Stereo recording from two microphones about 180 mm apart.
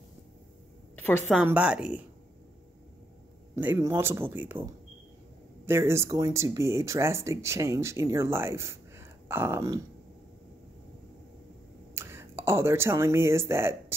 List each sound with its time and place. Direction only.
1.3 s a woman's voice: 5° right (ahead or behind)
3.5 s speech: 10° right (ahead or behind)
5.7 s speech: 15° right (ahead or behind)
11.9 s speech: 15° right (ahead or behind)